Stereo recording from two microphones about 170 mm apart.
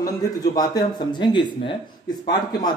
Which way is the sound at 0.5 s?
25° left (ahead or behind).